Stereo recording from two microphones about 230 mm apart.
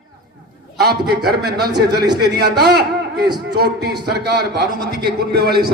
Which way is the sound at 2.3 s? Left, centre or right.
Right.